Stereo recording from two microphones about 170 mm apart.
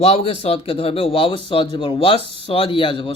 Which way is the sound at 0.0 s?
35° left (ahead or behind).